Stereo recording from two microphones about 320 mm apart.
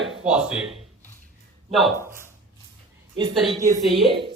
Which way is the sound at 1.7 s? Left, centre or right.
Centre.